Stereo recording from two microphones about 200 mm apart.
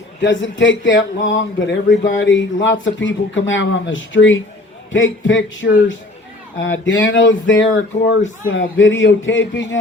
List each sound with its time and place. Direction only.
0.2 s speech: 65° left (ahead or behind)